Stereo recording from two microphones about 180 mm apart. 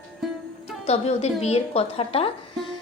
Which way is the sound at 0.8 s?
35° left (ahead or behind).